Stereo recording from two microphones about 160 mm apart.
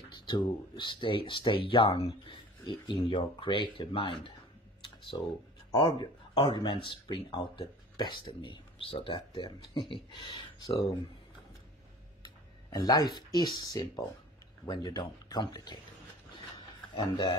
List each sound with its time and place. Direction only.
0.3 s speech: 30° left (ahead or behind)
12.6 s speech: 25° left (ahead or behind)
14.7 s speech: 25° left (ahead or behind)
16.5 s a sound: 30° left (ahead or behind)